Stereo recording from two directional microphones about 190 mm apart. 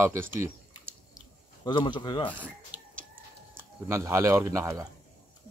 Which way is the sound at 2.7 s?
10° right (ahead or behind).